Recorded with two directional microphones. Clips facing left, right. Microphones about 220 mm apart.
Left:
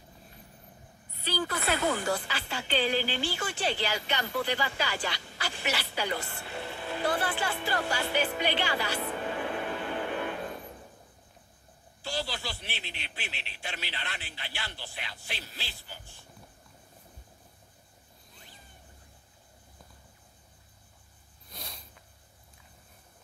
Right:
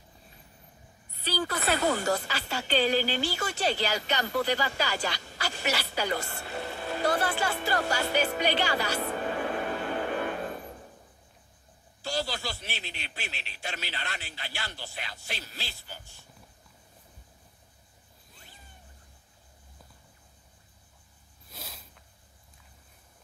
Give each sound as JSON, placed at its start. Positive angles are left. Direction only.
{"t": 1.2, "sound": "a woman's voice", "side_deg": -45}
{"t": 12.0, "sound": "speech", "side_deg": -40}
{"t": 21.5, "sound": "a sound", "side_deg": -5}